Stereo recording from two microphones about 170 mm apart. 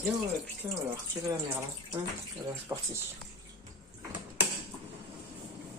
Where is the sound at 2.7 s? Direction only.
20° right (ahead or behind).